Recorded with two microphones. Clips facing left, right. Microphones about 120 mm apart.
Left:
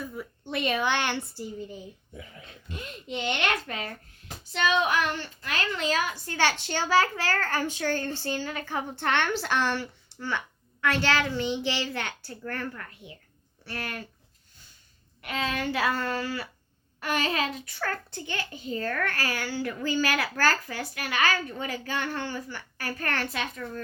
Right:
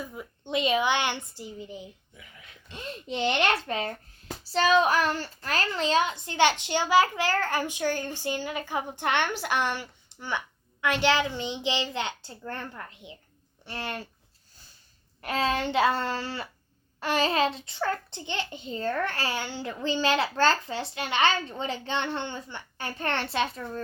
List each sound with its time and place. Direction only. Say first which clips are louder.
0.1 s a child's voice: right 2 dB; 15° right (ahead or behind)
2.1 s speech: left 7 dB; 35° left (ahead or behind)
2.6 s a child's voice: right 2 dB; 30° right (ahead or behind)
15.2 s a child's voice: right 3 dB; 35° right (ahead or behind)